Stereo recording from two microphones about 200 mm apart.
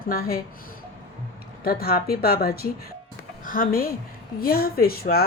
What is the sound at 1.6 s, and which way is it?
A woman's voice, 50° left (ahead or behind).